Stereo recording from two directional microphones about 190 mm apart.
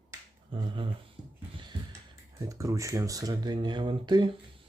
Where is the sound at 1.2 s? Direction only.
5° right (ahead or behind).